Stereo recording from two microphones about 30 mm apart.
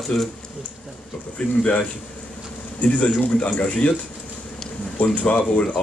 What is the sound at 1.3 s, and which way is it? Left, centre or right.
Speech, left.